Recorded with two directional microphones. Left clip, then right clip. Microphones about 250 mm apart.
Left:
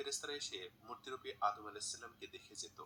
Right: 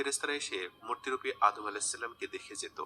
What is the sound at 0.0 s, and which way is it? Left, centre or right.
Speech, right.